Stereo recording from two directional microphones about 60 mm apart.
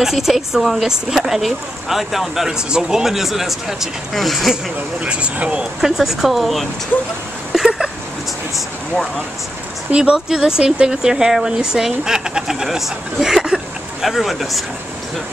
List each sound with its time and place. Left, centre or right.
0.0 s speech: centre
5.0 s speech: centre
5.8 s speech: centre
7.5 s a sound: centre
9.8 s speech: centre